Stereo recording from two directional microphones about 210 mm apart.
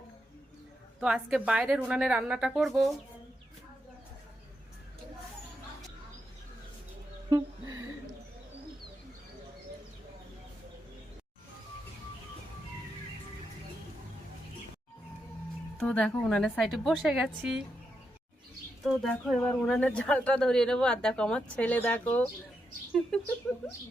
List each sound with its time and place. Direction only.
0.9 s speech: 5° right (ahead or behind)
7.3 s a sound: 15° right (ahead or behind)
15.8 s speech: 5° left (ahead or behind)
18.9 s speech: centre (ahead or behind)